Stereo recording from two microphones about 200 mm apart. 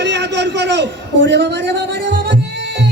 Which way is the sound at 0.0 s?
60° right (ahead or behind).